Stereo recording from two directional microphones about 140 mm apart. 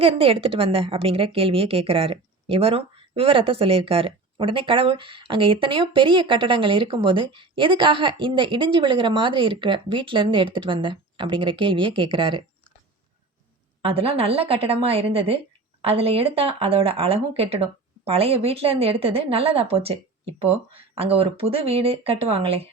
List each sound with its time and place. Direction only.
0.0 s a woman's voice: 40° right (ahead or behind)
13.8 s speech: 40° right (ahead or behind)